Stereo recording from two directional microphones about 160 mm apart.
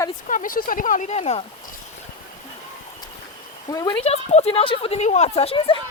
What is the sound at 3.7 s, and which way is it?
Speech, 25° left (ahead or behind).